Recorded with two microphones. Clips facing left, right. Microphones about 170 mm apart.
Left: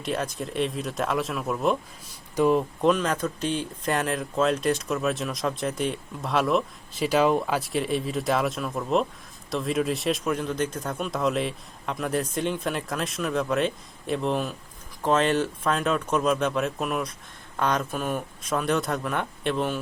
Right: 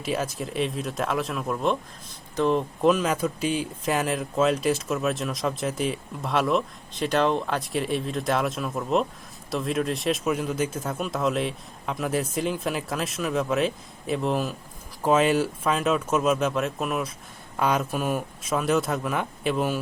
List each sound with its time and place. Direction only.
0.0 s speech: 5° right (ahead or behind)